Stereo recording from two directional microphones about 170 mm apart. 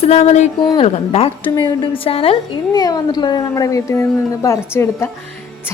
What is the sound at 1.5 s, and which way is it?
A woman's voice, 25° left (ahead or behind).